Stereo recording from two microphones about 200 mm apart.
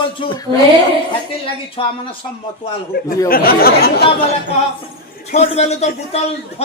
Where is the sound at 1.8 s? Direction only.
30° left (ahead or behind).